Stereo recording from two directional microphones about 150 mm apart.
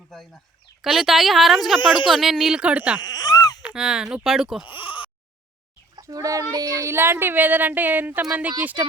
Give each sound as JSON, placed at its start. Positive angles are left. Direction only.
{"t": 0.8, "sound": "speech", "side_deg": 0}
{"t": 3.0, "sound": "speech", "side_deg": 25}
{"t": 3.6, "sound": "speech", "side_deg": -5}
{"t": 4.7, "sound": "speech", "side_deg": 35}
{"t": 6.0, "sound": "a child's voice", "side_deg": -25}